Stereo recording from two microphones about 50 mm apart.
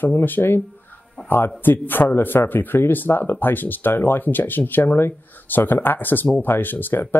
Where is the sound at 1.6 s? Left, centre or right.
Left.